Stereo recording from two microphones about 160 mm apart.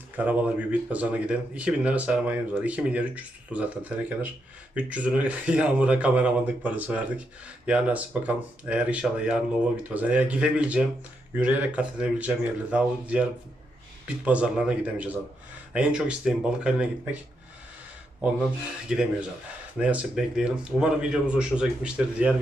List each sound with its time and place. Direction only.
0.2 s speech: 10° right (ahead or behind)
14.3 s speech: 5° right (ahead or behind)
18.9 s a man's voice: 5° right (ahead or behind)